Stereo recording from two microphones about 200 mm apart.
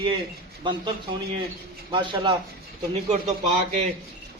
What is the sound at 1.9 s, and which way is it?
Speech, 25° right (ahead or behind).